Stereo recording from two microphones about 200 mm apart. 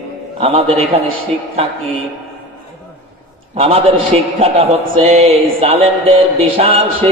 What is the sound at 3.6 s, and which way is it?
A man's voice, 30° right (ahead or behind).